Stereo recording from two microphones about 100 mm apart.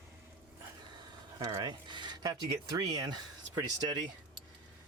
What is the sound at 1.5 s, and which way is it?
Speech, 50° right (ahead or behind).